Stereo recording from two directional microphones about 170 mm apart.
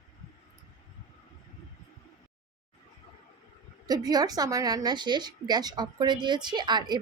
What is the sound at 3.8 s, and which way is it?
Speech, 20° right (ahead or behind).